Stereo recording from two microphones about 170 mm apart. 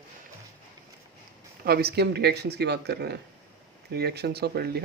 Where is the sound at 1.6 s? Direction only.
65° right (ahead or behind).